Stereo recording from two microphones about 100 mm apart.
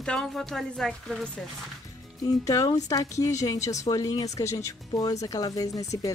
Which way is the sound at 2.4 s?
35° left (ahead or behind).